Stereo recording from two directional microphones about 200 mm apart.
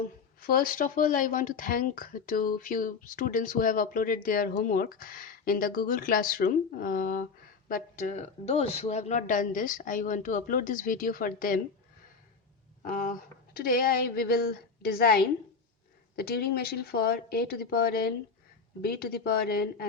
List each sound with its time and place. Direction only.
0.0 s speech: 45° left (ahead or behind)
12.8 s speech: 45° left (ahead or behind)